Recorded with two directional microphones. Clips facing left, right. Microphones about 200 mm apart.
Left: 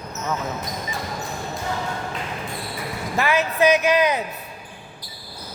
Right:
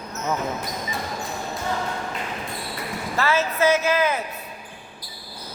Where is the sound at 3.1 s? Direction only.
15° left (ahead or behind).